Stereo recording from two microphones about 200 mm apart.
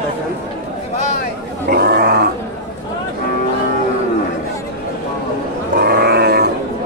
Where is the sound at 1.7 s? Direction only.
50° right (ahead or behind).